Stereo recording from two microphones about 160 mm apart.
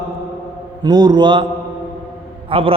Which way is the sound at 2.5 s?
35° right (ahead or behind).